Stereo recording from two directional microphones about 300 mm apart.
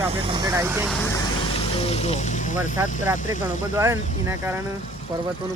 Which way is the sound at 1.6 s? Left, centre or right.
Centre.